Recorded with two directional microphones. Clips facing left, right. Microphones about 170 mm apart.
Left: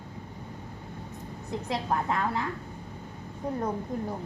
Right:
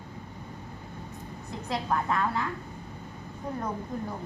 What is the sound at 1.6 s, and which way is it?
Speech, 25° left (ahead or behind).